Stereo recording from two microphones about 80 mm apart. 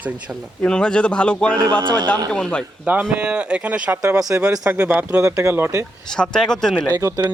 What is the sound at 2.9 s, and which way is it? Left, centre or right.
Speech, centre.